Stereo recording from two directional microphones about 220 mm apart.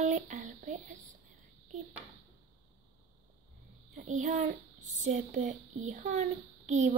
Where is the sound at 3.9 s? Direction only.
35° right (ahead or behind).